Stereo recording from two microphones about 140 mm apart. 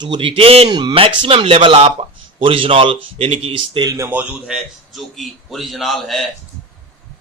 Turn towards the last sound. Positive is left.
turn(degrees=0)  # may be behind; listen again after turning